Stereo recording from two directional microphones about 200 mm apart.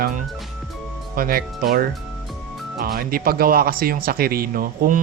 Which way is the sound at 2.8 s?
45° right (ahead or behind).